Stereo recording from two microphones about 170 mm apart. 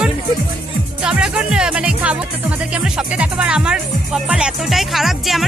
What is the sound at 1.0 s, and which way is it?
A woman's voice, 5° right (ahead or behind).